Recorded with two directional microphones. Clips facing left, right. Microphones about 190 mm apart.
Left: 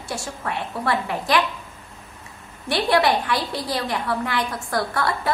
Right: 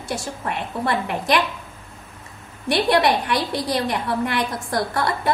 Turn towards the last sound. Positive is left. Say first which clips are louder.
# right 1 dB
turn(degrees=-20)  # may be behind; listen again after turning